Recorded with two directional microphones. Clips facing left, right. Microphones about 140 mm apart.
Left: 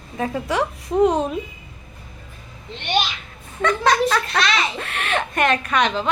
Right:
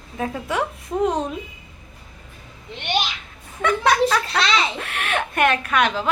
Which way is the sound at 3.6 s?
10° right (ahead or behind).